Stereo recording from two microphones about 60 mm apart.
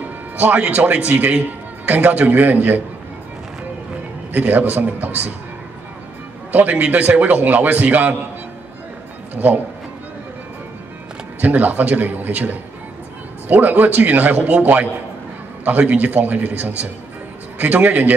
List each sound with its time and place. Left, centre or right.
0.4 s a man's voice: right
4.3 s a man's voice: right
6.5 s a man's voice: right
9.3 s speech: right
11.4 s a man's voice: right